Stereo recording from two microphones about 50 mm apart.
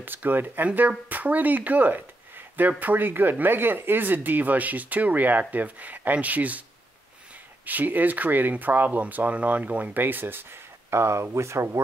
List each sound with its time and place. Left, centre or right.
0.0 s speech: right
7.6 s speech: right
10.9 s speech: right